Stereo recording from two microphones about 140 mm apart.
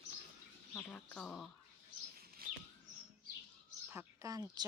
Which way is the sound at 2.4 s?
90° right.